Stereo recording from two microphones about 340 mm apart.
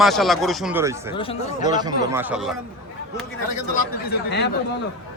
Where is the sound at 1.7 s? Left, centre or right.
Centre.